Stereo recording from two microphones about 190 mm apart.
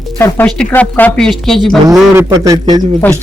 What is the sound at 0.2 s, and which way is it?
Speech, 5° left (ahead or behind).